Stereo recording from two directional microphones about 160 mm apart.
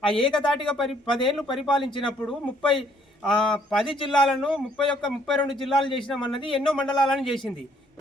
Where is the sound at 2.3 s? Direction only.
Centre (ahead or behind).